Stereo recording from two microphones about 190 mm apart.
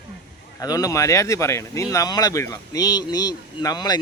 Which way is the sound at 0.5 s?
20° left (ahead or behind).